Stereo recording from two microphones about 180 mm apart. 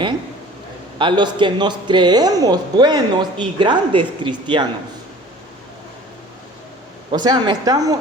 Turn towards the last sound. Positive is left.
turn(degrees=-25)  # may be behind; listen again after turning